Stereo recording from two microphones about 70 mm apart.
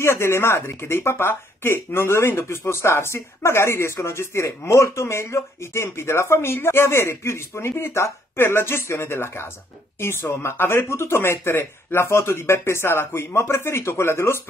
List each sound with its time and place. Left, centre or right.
0.0 s speech: left
10.4 s speech: left